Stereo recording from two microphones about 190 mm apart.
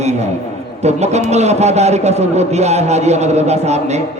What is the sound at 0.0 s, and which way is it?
A man's voice, 35° right (ahead or behind).